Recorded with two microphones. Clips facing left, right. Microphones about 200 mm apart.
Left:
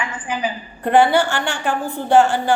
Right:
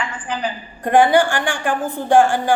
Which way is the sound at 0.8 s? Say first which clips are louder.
Even; 45° right (ahead or behind).